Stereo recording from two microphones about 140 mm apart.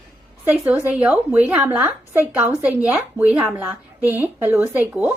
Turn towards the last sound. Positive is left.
turn(degrees=-15)  # may be behind; listen again after turning